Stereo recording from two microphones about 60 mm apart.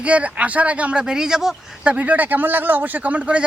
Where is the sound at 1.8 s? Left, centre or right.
Right.